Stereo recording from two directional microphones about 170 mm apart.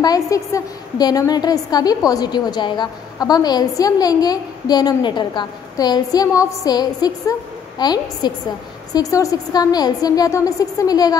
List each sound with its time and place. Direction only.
0.0 s a woman's voice: 20° left (ahead or behind)